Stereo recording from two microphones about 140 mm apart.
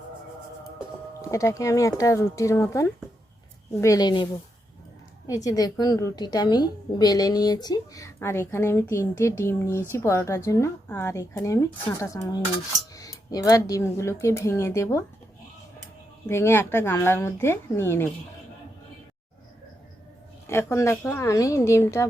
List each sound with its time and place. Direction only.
1.3 s a woman's voice: 20° left (ahead or behind)
5.3 s a woman's voice: 25° left (ahead or behind)
16.3 s speech: 20° left (ahead or behind)
20.5 s a woman's voice: 20° left (ahead or behind)